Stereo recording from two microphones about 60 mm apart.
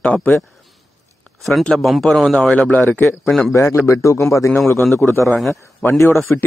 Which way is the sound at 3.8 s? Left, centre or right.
Left.